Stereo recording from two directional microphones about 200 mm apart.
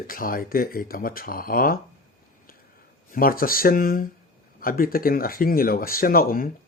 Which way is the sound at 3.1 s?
45° left (ahead or behind).